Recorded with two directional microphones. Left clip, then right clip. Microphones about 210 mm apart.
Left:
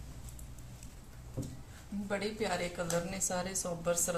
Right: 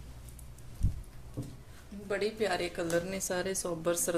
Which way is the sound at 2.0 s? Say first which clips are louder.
Right 4 dB; 50° right (ahead or behind).